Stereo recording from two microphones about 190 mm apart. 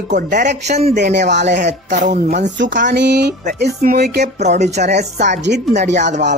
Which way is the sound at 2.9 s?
60° right (ahead or behind).